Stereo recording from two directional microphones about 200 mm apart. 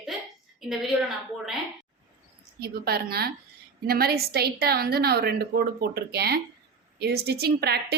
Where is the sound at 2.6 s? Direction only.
50° right (ahead or behind).